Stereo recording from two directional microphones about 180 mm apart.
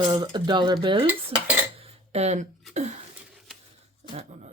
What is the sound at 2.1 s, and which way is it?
Speech, 35° right (ahead or behind).